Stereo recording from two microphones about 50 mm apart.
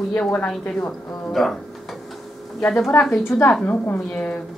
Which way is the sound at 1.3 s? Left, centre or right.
Centre.